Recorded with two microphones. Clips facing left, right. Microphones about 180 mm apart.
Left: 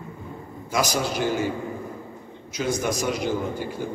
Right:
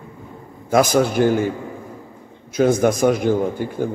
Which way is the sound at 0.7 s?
55° right (ahead or behind).